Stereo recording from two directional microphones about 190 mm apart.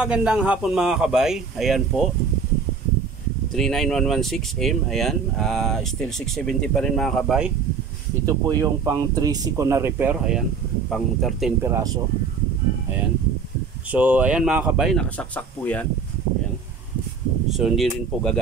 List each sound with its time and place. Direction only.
0.0 s speech: 5° right (ahead or behind)
3.5 s speech: centre (ahead or behind)
8.3 s speech: 20° right (ahead or behind); by 11.7 s centre (ahead or behind)
11.7 s speech: 20° right (ahead or behind)
13.9 s speech: 10° right (ahead or behind); by 15.8 s 10° left (ahead or behind)
17.5 s speech: centre (ahead or behind)